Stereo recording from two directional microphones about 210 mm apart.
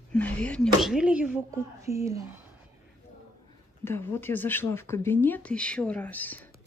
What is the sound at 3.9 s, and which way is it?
Speech, 10° left (ahead or behind).